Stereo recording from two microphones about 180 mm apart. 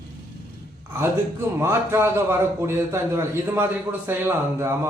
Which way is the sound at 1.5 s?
15° right (ahead or behind).